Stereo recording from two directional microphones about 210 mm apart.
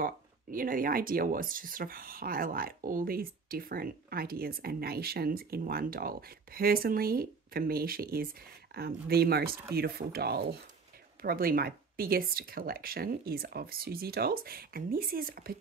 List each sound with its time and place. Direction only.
0.0 s speech: 40° right (ahead or behind)